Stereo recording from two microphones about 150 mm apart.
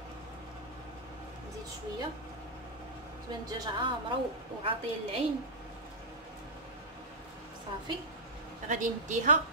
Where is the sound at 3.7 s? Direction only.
35° right (ahead or behind).